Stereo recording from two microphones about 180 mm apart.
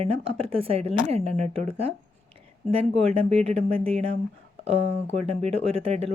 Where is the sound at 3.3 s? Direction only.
35° right (ahead or behind).